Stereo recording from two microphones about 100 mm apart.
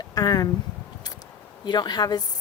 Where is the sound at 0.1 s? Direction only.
40° left (ahead or behind).